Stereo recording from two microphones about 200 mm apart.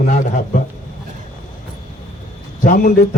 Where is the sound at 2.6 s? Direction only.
45° left (ahead or behind).